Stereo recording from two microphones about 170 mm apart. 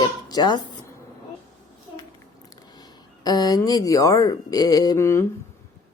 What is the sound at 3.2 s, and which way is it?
Speech, 20° left (ahead or behind).